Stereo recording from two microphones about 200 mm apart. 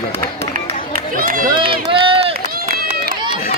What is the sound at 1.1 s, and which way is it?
Run, 45° right (ahead or behind).